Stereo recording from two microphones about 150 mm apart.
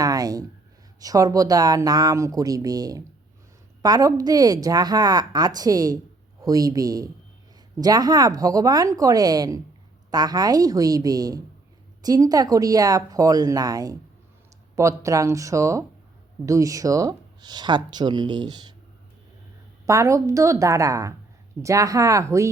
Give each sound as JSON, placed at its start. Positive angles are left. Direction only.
{"t": 0.0, "sound": "a sound", "side_deg": -25}
{"t": 0.9, "sound": "speech", "side_deg": -25}
{"t": 19.8, "sound": "speech", "side_deg": -20}